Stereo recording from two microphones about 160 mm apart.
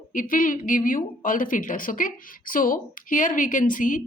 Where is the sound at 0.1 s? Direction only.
55° left (ahead or behind).